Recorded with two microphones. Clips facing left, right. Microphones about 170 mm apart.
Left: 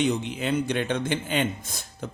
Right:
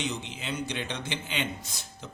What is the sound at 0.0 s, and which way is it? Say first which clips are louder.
Speech: left 9 dB; 55° left (ahead or behind).